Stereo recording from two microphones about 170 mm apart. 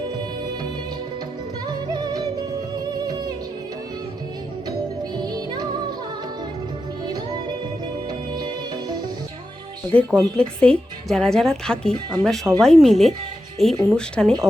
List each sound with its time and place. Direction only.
1.6 s music: 25° right (ahead or behind)
5.2 s music: 25° right (ahead or behind)
8.3 s music: 25° right (ahead or behind)
9.9 s a woman's voice: 5° left (ahead or behind)